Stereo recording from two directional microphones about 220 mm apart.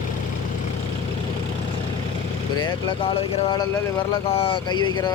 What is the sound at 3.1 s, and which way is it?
Speech, 20° left (ahead or behind).